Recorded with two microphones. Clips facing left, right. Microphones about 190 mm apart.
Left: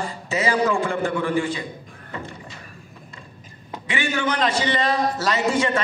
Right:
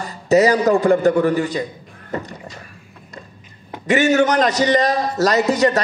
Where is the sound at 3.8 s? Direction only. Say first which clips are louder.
Right 10 dB; 40° right (ahead or behind).